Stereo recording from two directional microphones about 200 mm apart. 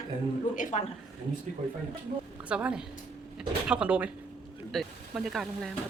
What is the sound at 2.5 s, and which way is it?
Speech, 5° right (ahead or behind).